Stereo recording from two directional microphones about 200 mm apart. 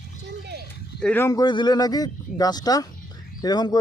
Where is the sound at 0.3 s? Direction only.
60° right (ahead or behind).